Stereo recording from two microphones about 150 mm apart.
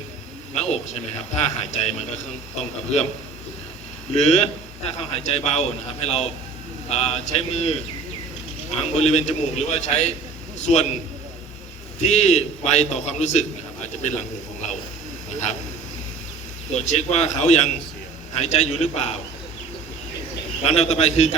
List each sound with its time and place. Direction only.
0.5 s a man's voice: 45° left (ahead or behind)
4.1 s a man's voice: 45° left (ahead or behind)
8.8 s a man's voice: 45° left (ahead or behind)
11.9 s a man's voice: 50° left (ahead or behind)
15.3 s a sound: 50° left (ahead or behind)
16.7 s a man's voice: 50° left (ahead or behind)
20.7 s a man's voice: 45° left (ahead or behind)